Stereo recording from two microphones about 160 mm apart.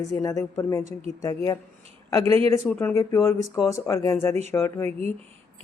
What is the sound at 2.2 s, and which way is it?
Speech, 35° right (ahead or behind).